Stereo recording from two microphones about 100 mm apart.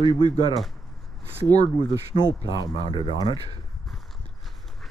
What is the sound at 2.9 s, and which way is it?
Speech, 50° left (ahead or behind).